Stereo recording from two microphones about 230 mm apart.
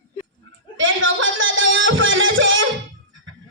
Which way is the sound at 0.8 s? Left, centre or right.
Right.